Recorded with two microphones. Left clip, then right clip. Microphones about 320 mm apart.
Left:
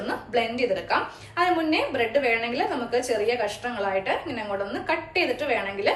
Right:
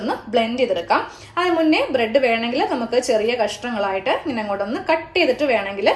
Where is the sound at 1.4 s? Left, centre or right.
Right.